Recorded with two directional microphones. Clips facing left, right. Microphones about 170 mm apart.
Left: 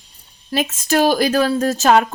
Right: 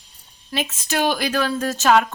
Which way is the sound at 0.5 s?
45° left (ahead or behind).